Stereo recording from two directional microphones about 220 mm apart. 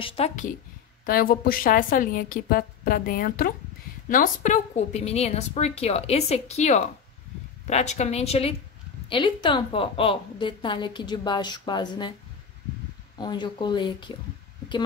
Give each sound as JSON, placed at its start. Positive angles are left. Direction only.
{"t": 0.0, "sound": "a woman's voice", "side_deg": 25}
{"t": 1.0, "sound": "a woman's voice", "side_deg": 40}
{"t": 13.2, "sound": "a woman's voice", "side_deg": 20}